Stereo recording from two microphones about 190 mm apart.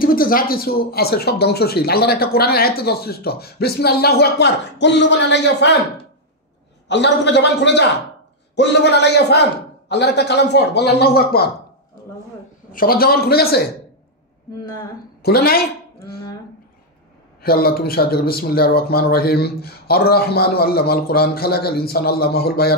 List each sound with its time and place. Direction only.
0.0 s speech: 50° left (ahead or behind); by 5.8 s 65° left (ahead or behind)
6.9 s speech: 65° left (ahead or behind)
12.7 s a man's voice: 50° left (ahead or behind)
14.6 s speech: 20° left (ahead or behind)
15.2 s speech: 55° left (ahead or behind)
17.4 s speech: 55° left (ahead or behind)